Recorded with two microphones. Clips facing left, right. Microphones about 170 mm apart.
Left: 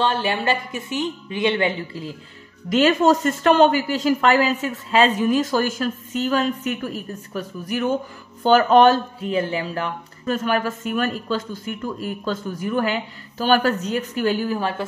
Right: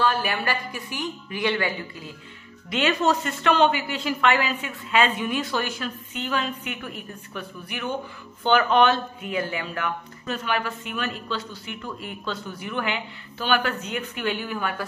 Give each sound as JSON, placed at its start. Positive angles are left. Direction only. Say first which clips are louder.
{"t": 0.0, "sound": "a woman's voice", "louder": "left 3 dB", "side_deg": 25}
{"t": 2.7, "sound": "speech", "louder": "left 6 dB", "side_deg": 45}
{"t": 10.2, "sound": "speech", "louder": "left 6 dB", "side_deg": 45}